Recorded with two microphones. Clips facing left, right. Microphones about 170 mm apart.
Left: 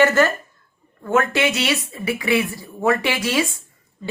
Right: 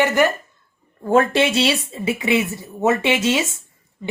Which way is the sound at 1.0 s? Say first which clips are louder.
Right 3 dB; 30° right (ahead or behind).